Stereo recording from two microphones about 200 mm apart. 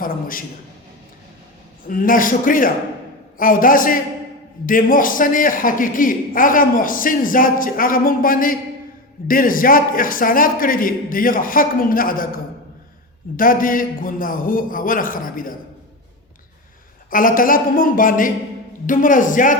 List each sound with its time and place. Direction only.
0.0 s a man's voice: 45° left (ahead or behind)
1.9 s a man's voice: 45° left (ahead or behind)
13.3 s a man's voice: 45° left (ahead or behind)
17.1 s a man's voice: 45° left (ahead or behind)